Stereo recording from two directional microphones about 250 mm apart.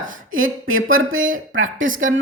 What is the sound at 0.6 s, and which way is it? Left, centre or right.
Speech, right.